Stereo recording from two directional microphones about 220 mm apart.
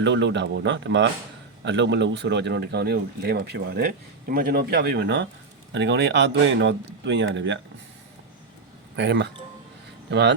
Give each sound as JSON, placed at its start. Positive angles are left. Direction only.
{"t": 0.0, "sound": "speech", "side_deg": -55}
{"t": 9.0, "sound": "speech", "side_deg": -55}